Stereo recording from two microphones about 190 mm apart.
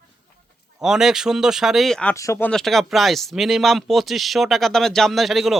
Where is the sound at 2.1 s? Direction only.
15° left (ahead or behind).